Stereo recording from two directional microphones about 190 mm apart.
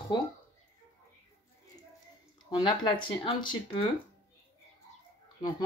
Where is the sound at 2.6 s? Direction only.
25° left (ahead or behind).